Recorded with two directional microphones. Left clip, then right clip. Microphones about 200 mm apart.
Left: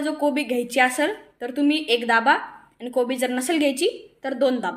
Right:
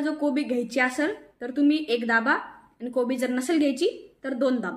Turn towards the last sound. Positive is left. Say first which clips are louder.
# left 4 dB
turn(degrees=-20)  # may be behind; listen again after turning